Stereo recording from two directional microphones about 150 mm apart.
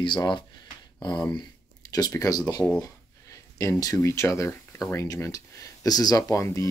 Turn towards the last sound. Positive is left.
turn(degrees=20)  # may be behind; listen again after turning